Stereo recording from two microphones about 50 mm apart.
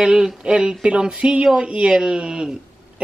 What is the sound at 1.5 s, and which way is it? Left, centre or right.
A woman's voice, right.